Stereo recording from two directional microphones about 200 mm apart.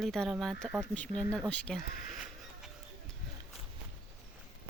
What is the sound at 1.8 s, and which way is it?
Speech, 45° left (ahead or behind).